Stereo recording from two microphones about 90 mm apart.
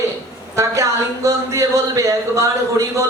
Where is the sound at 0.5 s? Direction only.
35° right (ahead or behind).